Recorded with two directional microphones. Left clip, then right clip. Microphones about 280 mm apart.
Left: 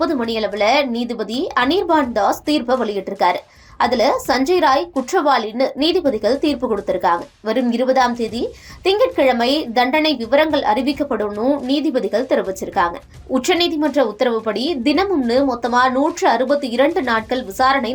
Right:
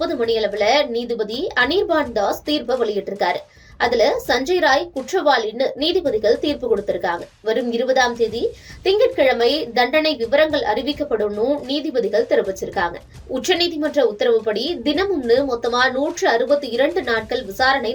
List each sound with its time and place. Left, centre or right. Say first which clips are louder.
0.0 s a woman's voice: even; centre